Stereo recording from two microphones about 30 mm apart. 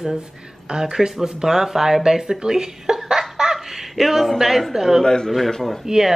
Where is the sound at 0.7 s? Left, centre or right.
Right.